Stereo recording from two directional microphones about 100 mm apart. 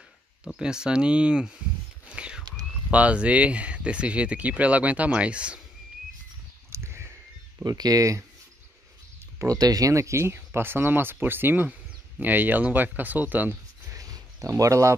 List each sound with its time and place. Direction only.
0.5 s speech: 5° right (ahead or behind)
2.0 s whispering: 10° right (ahead or behind)
2.9 s speech: 15° right (ahead or behind)
6.7 s a sound: 25° right (ahead or behind)
7.6 s speech: 40° right (ahead or behind)
9.4 s speech: 35° right (ahead or behind); by 13.6 s 15° right (ahead or behind)
13.8 s a sound: 35° right (ahead or behind)